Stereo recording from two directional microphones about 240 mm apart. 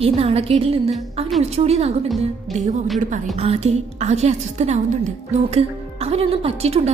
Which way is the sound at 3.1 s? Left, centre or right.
Right.